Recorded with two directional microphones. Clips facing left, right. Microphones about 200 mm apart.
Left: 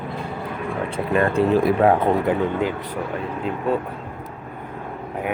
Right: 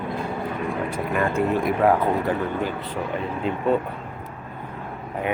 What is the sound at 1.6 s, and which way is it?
Speech, 30° left (ahead or behind).